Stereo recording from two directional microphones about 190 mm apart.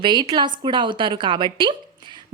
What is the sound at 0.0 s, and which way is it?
A woman's voice, 25° right (ahead or behind).